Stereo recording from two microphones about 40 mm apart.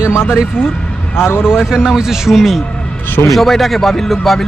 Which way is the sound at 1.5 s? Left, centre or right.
Centre.